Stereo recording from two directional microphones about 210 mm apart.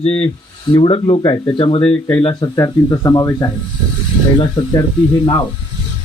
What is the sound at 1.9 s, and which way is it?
Speech, 10° left (ahead or behind).